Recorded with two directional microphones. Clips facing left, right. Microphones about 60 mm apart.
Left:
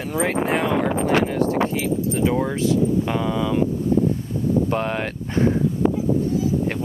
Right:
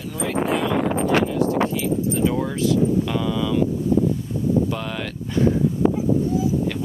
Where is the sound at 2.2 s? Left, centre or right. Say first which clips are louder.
Left 1 dB; left.